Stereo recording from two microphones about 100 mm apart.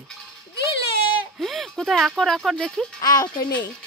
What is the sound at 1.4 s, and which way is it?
Speech, centre (ahead or behind).